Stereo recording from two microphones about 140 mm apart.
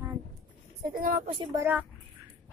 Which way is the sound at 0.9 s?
85° right.